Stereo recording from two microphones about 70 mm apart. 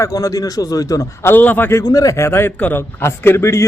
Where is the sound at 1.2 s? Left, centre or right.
Left.